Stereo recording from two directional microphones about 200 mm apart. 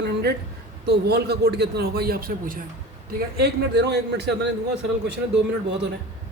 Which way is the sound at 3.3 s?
55° right (ahead or behind).